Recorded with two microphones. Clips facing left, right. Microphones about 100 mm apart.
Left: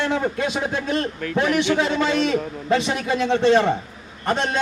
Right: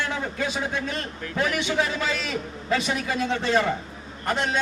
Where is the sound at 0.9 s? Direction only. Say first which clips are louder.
Left 8 dB; 65° left (ahead or behind).